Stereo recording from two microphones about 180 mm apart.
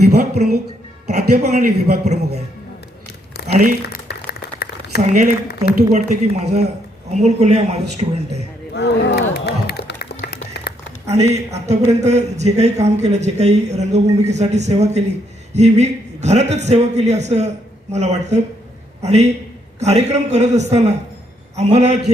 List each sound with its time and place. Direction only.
0.0 s a sound: 60° right (ahead or behind)
1.0 s speech: 40° right (ahead or behind)
3.5 s speech: 50° right (ahead or behind)
4.1 s a sound: 60° left (ahead or behind)
5.0 s speech: 40° right (ahead or behind)
8.7 s music: 70° left (ahead or behind)
11.1 s speech: 35° right (ahead or behind)